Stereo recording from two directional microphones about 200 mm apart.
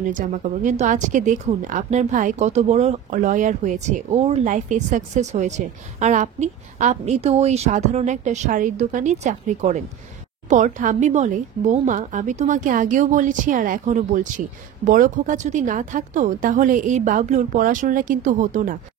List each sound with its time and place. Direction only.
0.1 s speech: 40° right (ahead or behind)